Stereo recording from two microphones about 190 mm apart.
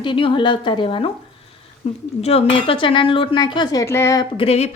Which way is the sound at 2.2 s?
30° left (ahead or behind).